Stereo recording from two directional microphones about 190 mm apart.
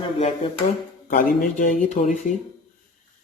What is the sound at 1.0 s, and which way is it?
Speech, 45° left (ahead or behind).